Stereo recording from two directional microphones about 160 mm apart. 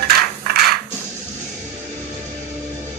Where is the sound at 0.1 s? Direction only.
75° right (ahead or behind).